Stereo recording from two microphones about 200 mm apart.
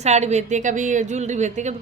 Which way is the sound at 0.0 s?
35° right (ahead or behind).